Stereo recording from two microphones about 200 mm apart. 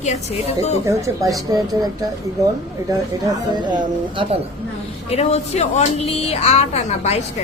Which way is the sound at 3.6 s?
20° right (ahead or behind).